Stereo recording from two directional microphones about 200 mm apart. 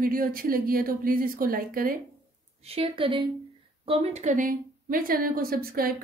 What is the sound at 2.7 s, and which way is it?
A woman's voice, 25° right (ahead or behind).